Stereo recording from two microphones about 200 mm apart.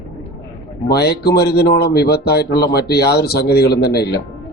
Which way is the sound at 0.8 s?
55° left (ahead or behind).